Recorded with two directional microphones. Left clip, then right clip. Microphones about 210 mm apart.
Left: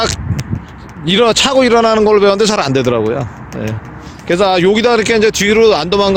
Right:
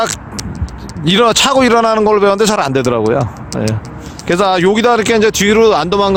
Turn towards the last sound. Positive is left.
turn(degrees=-5)  # may be behind; listen again after turning